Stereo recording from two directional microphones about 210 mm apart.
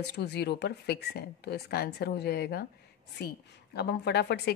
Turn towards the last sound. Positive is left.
turn(degrees=55)  # may be behind; listen again after turning